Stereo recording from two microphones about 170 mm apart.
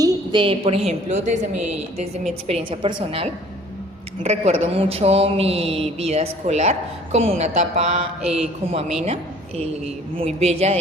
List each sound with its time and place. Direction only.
0.0 s speech: 25° right (ahead or behind)